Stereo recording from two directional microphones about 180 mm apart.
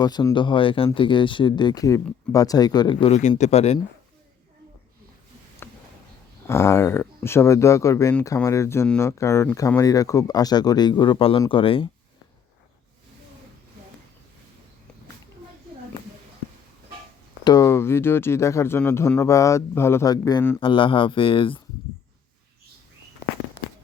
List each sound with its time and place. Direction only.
0.0 s speech: 25° left (ahead or behind)
5.6 s a sound: 10° left (ahead or behind)
6.5 s speech: 15° left (ahead or behind); by 11.9 s 30° left (ahead or behind)
17.4 s speech: 20° left (ahead or behind)
20.6 s speech: 30° left (ahead or behind)